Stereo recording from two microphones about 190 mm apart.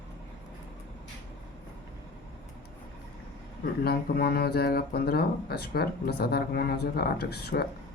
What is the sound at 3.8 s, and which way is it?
Speech, 55° left (ahead or behind).